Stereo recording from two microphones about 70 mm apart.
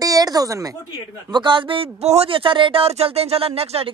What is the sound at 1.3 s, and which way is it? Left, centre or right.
Speech, right.